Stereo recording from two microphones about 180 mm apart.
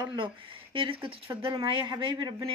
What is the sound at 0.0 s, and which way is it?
Speech, 25° right (ahead or behind).